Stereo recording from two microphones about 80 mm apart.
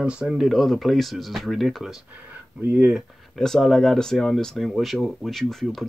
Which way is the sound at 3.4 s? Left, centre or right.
Centre.